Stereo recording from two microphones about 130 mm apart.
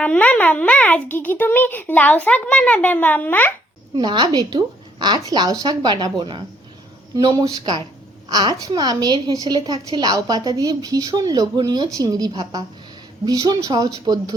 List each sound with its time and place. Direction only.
0.0 s a child's voice: 10° left (ahead or behind)
3.9 s a woman's voice: 35° right (ahead or behind)